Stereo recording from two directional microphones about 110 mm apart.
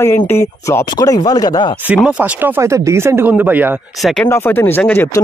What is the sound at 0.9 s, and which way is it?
Chopping, 35° left (ahead or behind).